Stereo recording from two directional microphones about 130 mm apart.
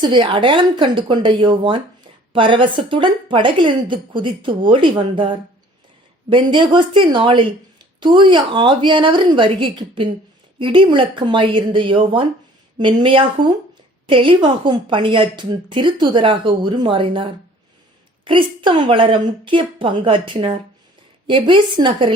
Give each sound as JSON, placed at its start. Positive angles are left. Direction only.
{"t": 0.0, "sound": "a woman's voice", "side_deg": -35}
{"t": 18.3, "sound": "a woman's voice", "side_deg": -40}